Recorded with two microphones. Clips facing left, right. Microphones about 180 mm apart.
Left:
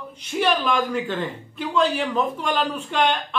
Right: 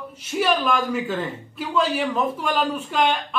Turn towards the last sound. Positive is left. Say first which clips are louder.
# right 1 dB
turn(degrees=-5)  # may be behind; listen again after turning